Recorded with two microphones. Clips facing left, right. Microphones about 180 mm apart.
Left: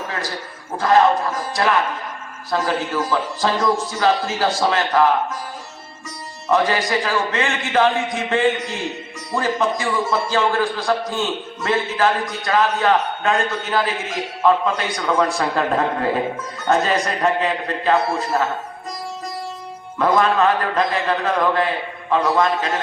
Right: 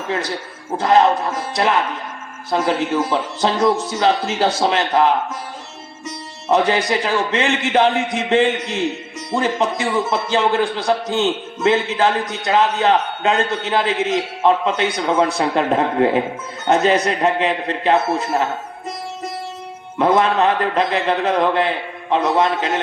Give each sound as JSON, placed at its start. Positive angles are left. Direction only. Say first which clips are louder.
{"t": 0.8, "sound": "a man's voice", "louder": "right 1 dB", "side_deg": -20}
{"t": 2.5, "sound": "a man's voice", "louder": "right 3 dB", "side_deg": -20}
{"t": 6.5, "sound": "a man's voice", "louder": "right 2 dB", "side_deg": -20}
{"t": 20.0, "sound": "a man's voice", "louder": "right 1 dB", "side_deg": -25}